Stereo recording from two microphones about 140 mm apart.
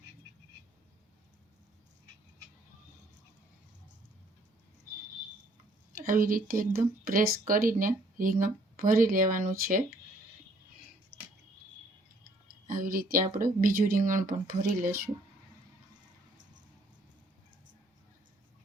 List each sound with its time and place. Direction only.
5.9 s speech: 85° right
12.6 s a sound: 90° right
13.3 s speech: 85° right